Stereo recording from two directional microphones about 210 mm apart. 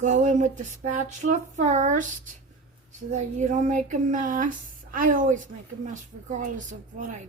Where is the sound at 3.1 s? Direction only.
35° right (ahead or behind).